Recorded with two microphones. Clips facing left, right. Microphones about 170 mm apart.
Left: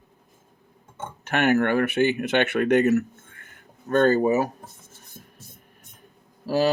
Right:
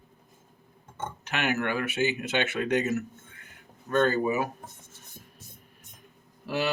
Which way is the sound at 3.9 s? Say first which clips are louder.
Left 6 dB; 45° left (ahead or behind).